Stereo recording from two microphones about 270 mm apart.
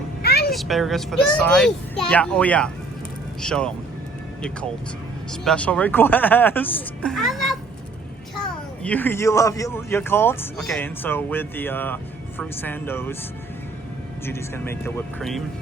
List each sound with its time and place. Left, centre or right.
0.2 s a sound: left
0.5 s speech: centre
5.3 s speech: centre
8.8 s speech: centre
14.3 s speech: centre